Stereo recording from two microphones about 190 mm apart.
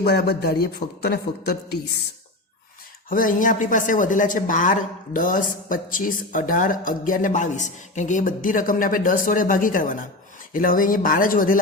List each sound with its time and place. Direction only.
0.0 s speech: 60° left (ahead or behind)
3.1 s speech: 45° left (ahead or behind)